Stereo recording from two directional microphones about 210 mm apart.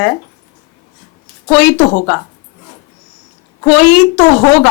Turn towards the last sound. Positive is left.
turn(degrees=10)  # may be behind; listen again after turning